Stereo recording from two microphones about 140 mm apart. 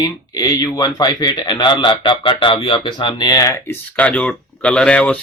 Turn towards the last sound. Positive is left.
turn(degrees=10)  # may be behind; listen again after turning